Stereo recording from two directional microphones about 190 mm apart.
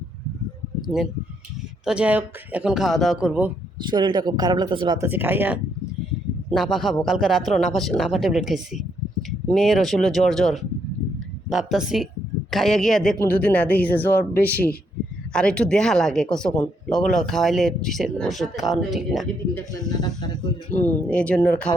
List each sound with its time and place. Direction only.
1.8 s speech: 5° right (ahead or behind)
3.8 s speech: 25° right (ahead or behind)
5.0 s speech: 10° right (ahead or behind)
6.5 s speech: centre (ahead or behind)
19.9 s speech: 20° left (ahead or behind)
20.7 s speech: 5° left (ahead or behind)